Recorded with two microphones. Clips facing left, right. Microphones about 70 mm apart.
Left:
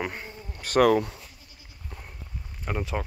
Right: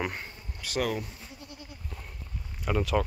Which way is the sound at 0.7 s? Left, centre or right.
Left.